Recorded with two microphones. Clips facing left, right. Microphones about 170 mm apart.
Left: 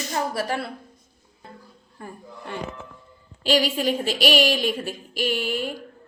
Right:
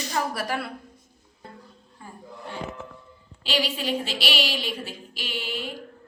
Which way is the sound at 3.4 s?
45° left (ahead or behind).